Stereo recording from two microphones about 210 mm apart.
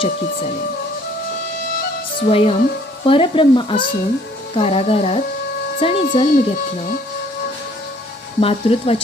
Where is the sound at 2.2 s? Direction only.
30° left (ahead or behind).